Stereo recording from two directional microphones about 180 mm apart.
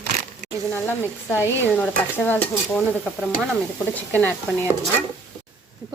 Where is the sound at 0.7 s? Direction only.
15° left (ahead or behind).